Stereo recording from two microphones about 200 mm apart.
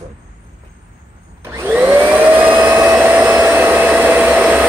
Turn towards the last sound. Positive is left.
turn(degrees=-10)  # may be behind; listen again after turning